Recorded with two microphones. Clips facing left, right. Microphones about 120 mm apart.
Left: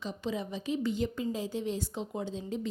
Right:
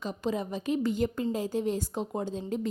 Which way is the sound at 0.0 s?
45° right (ahead or behind).